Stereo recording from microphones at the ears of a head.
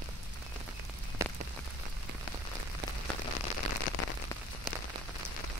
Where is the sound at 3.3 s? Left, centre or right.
Left.